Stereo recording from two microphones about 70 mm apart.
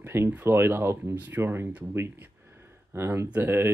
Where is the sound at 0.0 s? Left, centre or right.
Right.